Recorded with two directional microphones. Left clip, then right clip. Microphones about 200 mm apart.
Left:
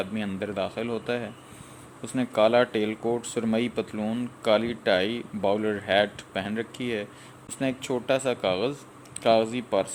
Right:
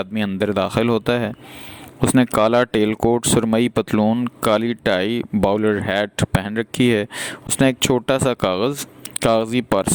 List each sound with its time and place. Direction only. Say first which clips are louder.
0.0 s speech: right 9 dB; 55° right (ahead or behind)